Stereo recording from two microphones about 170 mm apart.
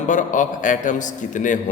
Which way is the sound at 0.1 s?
50° left (ahead or behind).